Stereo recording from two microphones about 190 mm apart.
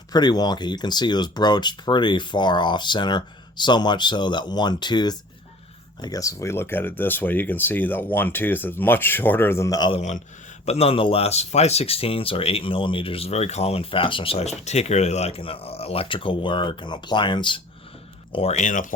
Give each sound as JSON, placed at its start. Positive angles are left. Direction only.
{"t": 0.1, "sound": "speech", "side_deg": 20}